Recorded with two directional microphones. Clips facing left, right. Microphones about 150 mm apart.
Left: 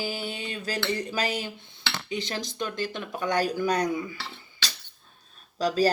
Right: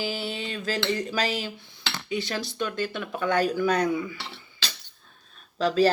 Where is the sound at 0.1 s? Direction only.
45° left (ahead or behind).